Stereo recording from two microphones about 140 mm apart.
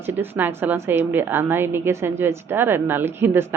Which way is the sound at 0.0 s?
15° right (ahead or behind).